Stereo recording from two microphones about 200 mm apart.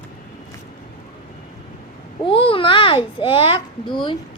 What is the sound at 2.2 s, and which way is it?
A child's voice, 25° left (ahead or behind).